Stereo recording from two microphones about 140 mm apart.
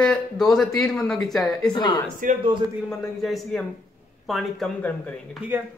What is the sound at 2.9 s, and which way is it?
A man's voice, centre (ahead or behind).